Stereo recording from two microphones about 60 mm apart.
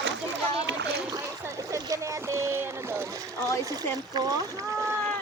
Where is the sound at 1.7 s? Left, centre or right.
Right.